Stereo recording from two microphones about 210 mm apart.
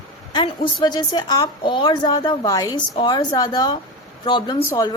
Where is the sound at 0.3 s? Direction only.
25° left (ahead or behind).